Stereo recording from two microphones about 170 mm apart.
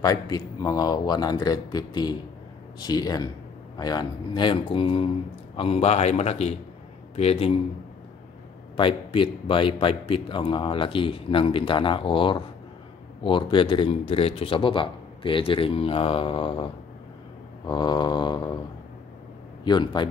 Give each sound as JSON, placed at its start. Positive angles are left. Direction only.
{"t": 0.0, "sound": "speech", "side_deg": 20}
{"t": 8.7, "sound": "speech", "side_deg": 30}
{"t": 19.6, "sound": "speech", "side_deg": 25}